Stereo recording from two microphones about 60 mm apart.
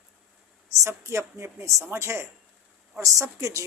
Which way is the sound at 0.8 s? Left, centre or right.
Right.